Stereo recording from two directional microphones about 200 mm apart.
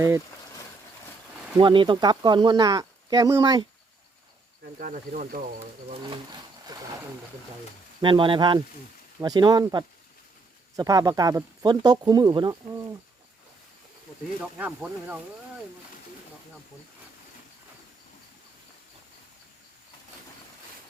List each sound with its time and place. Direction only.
1.5 s speech: 25° right (ahead or behind)
4.8 s speech: 40° right (ahead or behind); by 7.0 s 20° right (ahead or behind)
8.0 s speech: 25° right (ahead or behind)
14.6 s speech: 5° right (ahead or behind)